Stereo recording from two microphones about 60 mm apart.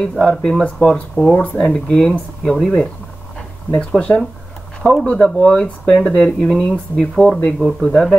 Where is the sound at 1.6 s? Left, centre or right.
Centre.